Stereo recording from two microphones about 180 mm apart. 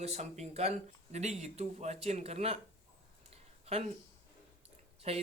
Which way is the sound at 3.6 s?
35° right (ahead or behind).